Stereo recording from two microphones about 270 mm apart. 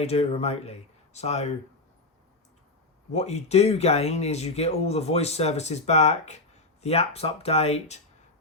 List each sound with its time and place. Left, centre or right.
0.0 s speech: left
3.1 s speech: left